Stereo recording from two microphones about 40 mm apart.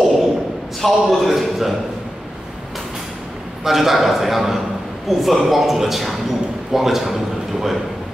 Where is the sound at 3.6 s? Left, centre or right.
Centre.